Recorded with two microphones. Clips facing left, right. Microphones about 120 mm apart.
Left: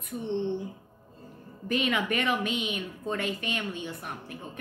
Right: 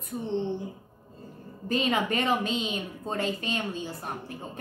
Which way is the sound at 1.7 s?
30° right (ahead or behind).